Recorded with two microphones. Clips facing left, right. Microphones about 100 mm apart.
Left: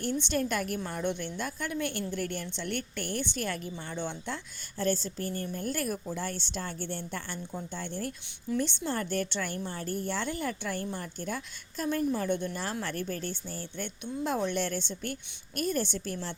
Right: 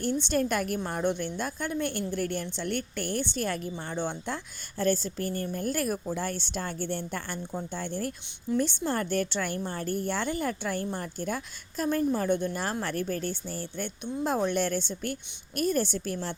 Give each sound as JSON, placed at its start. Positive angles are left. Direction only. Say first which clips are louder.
{"t": 0.0, "sound": "a woman's voice", "louder": "right 3 dB", "side_deg": -40}